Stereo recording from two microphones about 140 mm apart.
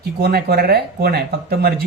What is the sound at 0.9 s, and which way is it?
Speech, 90° right.